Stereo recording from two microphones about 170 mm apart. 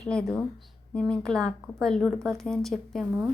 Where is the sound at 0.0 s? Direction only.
5° left (ahead or behind).